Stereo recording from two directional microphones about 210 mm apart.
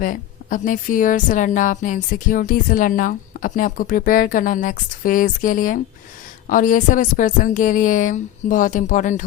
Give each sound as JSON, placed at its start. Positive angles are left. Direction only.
{"t": 0.0, "sound": "a woman's voice", "side_deg": 40}